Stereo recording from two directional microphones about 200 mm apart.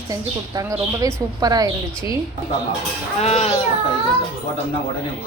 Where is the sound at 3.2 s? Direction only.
35° left (ahead or behind).